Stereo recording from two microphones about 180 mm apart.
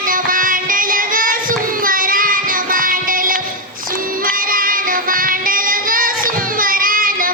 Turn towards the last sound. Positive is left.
turn(degrees=-50)  # may be behind; listen again after turning